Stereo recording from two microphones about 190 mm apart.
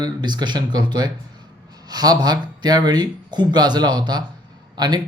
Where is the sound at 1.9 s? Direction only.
20° right (ahead or behind).